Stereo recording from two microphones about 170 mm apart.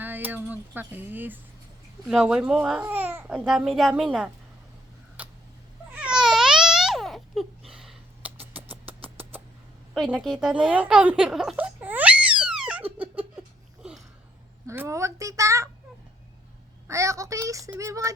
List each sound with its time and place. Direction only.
0.0 s speech: 10° right (ahead or behind)
5.9 s babbling: 5° right (ahead or behind)
7.7 s a sound: centre (ahead or behind)
9.9 s a sound: centre (ahead or behind)
14.7 s a child's voice: 15° right (ahead or behind)
16.8 s a woman's voice: 20° right (ahead or behind)